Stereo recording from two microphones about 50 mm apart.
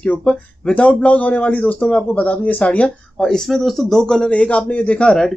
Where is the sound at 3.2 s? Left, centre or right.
Centre.